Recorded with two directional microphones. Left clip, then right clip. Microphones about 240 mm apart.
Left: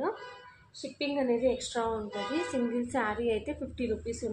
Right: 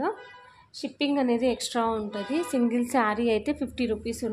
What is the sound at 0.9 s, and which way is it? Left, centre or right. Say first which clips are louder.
Speech: right 4 dB; right.